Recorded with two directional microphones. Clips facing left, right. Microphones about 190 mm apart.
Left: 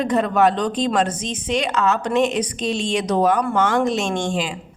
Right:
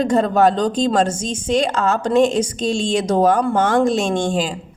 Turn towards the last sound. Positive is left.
turn(degrees=-40)  # may be behind; listen again after turning